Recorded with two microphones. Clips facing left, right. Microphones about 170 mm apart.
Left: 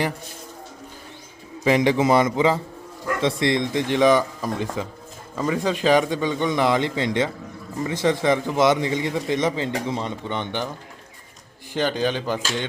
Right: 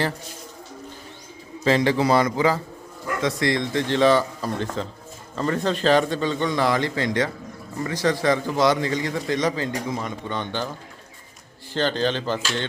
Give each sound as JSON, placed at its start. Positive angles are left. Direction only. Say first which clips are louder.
{"t": 1.6, "sound": "a man's voice", "louder": "left 1 dB", "side_deg": 15}
{"t": 11.7, "sound": "a man's voice", "louder": "even", "side_deg": 10}